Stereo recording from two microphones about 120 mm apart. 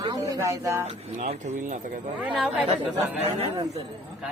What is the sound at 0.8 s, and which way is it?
Speech, 75° right (ahead or behind).